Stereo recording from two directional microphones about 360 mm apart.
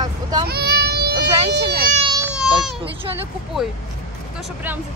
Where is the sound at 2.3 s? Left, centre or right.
Centre.